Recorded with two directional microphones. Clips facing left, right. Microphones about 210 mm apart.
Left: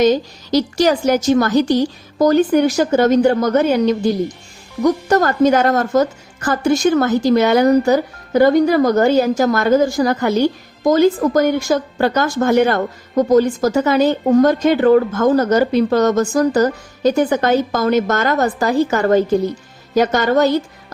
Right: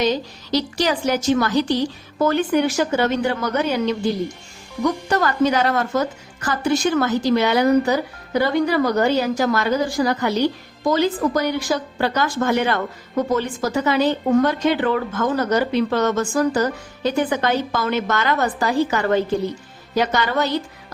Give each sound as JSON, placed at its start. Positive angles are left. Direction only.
{"t": 0.0, "sound": "speech", "side_deg": 45}